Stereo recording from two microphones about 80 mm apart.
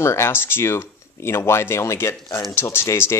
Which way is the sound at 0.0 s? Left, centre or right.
Left.